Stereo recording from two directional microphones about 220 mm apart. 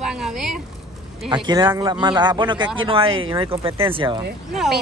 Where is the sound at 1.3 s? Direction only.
20° right (ahead or behind).